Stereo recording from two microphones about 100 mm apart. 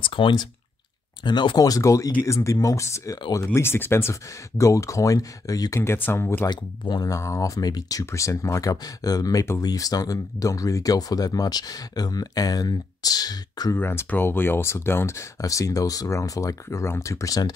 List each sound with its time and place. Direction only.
0.0 s speech: 55° left (ahead or behind)
1.6 s speech: 35° left (ahead or behind)
5.8 s speech: 20° left (ahead or behind)
6.4 s speech: 45° left (ahead or behind)
7.1 s speech: 30° left (ahead or behind)
13.7 s speech: 20° left (ahead or behind); by 17.6 s 40° left (ahead or behind)